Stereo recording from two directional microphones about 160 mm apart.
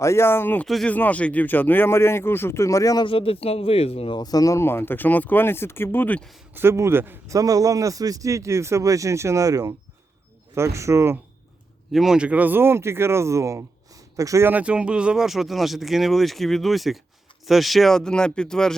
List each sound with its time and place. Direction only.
0.0 s speech: 15° left (ahead or behind)
6.5 s a man's voice: 15° right (ahead or behind)
11.9 s speech: 5° right (ahead or behind)